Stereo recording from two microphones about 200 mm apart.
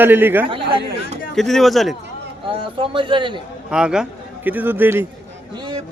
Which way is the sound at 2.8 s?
25° right (ahead or behind).